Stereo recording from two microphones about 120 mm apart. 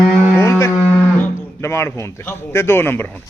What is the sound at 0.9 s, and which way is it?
Speech, 20° left (ahead or behind).